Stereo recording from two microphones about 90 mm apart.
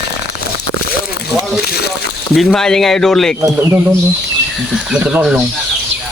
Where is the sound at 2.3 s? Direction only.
Centre (ahead or behind).